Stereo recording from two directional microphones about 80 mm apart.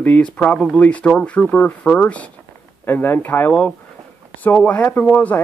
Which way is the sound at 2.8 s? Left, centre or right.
Left.